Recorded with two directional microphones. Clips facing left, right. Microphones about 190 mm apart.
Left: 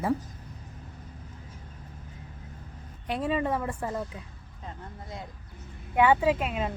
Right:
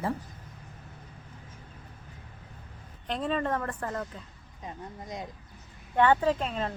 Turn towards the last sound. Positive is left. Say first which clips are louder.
# left 2 dB
turn(degrees=10)  # may be behind; listen again after turning